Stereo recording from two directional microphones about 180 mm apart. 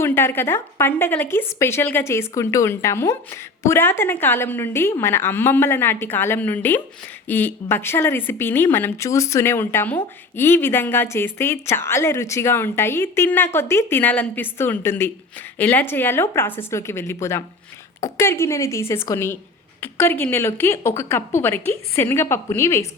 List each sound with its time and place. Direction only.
0.0 s speech: 15° left (ahead or behind)